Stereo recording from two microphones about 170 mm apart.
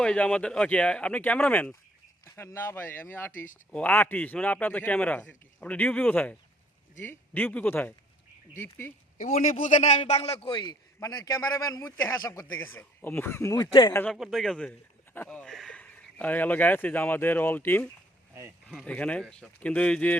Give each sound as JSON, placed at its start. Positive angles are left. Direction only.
{"t": 0.0, "sound": "a man's voice", "side_deg": 5}
{"t": 9.3, "sound": "a man's voice", "side_deg": 50}
{"t": 13.9, "sound": "a man's voice", "side_deg": 10}